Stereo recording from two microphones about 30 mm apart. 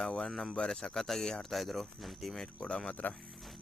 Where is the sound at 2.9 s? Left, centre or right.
Left.